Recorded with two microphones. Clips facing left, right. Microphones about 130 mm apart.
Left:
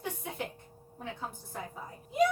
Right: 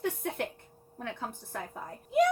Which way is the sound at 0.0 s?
60° right (ahead or behind).